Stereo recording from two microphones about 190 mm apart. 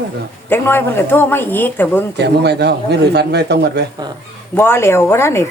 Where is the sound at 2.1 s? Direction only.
60° right (ahead or behind).